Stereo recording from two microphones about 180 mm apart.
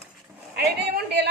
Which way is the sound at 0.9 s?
65° right (ahead or behind).